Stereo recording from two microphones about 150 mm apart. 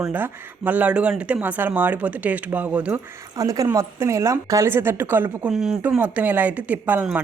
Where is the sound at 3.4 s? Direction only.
20° right (ahead or behind).